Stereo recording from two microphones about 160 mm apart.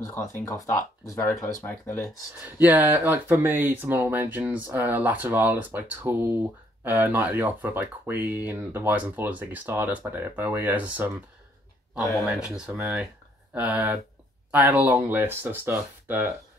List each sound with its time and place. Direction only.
0.0 s speech: 15° left (ahead or behind)
2.4 s speech: 10° right (ahead or behind)
11.9 s speech: 20° left (ahead or behind)
12.3 s speech: 5° right (ahead or behind)